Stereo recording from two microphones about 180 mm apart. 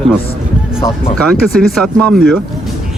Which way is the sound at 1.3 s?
Centre (ahead or behind).